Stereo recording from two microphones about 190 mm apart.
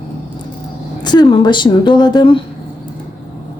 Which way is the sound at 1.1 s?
25° left (ahead or behind).